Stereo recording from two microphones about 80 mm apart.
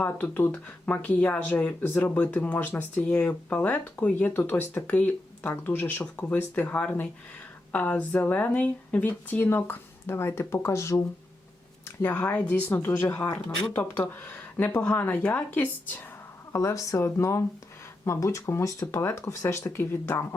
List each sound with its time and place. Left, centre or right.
0.0 s speech: left
12.1 s speech: centre; by 13.4 s left
14.8 s speech: left
16.5 s speech: left